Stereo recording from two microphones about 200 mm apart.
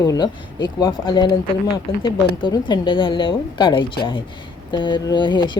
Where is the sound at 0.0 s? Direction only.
20° left (ahead or behind).